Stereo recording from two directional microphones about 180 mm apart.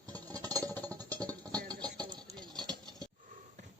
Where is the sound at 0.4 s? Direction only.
20° right (ahead or behind).